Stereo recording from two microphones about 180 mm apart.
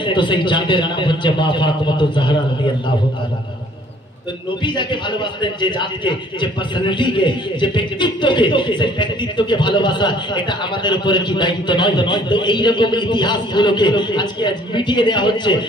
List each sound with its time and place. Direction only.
0.0 s a man's voice: 25° left (ahead or behind)
4.6 s a man's voice: 25° left (ahead or behind)